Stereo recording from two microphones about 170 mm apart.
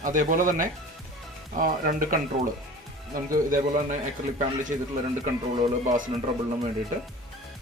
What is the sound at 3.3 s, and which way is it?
Speech, 50° right (ahead or behind).